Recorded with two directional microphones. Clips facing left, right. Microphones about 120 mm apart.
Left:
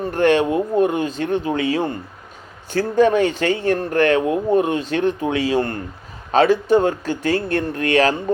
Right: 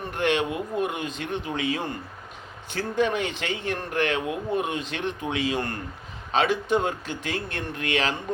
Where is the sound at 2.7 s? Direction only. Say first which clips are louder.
Left 9 dB; 40° left (ahead or behind).